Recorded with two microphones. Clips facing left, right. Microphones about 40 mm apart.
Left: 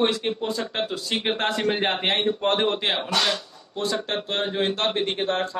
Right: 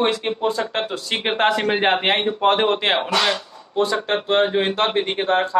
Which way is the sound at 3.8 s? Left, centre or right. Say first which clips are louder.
Right 6 dB; centre.